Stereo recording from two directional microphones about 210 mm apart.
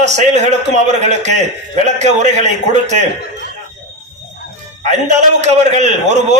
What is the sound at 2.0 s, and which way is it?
A man's voice, 35° right (ahead or behind).